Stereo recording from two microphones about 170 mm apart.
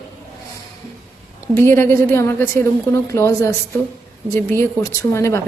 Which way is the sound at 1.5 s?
10° left (ahead or behind).